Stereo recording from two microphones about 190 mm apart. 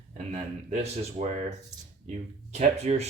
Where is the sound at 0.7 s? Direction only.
35° right (ahead or behind).